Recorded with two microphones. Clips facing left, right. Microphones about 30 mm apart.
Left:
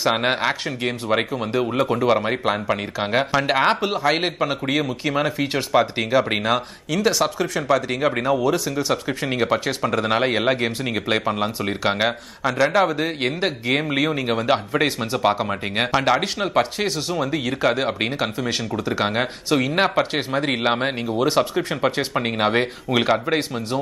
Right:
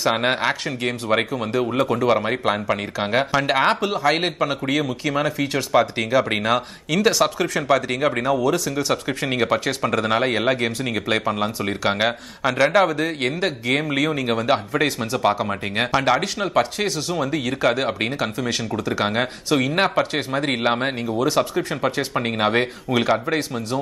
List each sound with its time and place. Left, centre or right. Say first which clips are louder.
0.0 s speech: even; centre
2.0 s a man's voice: even; centre
8.4 s a man's voice: even; centre
8.7 s a man's voice: even; centre
22.1 s a man's voice: even; centre